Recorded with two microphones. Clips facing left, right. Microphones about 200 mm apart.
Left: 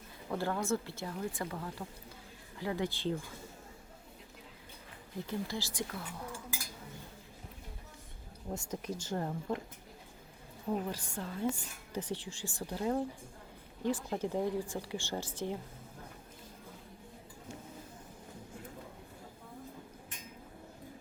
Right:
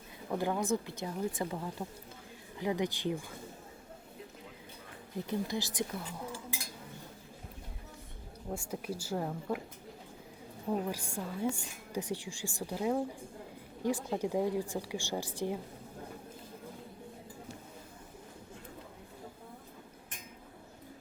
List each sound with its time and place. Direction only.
0.3 s speech: 15° right (ahead or behind)
5.1 s speech: 20° right (ahead or behind)
8.5 s speech: 10° right (ahead or behind)
10.7 s speech: 10° right (ahead or behind)